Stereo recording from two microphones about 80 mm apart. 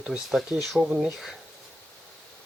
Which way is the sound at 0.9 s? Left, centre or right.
Centre.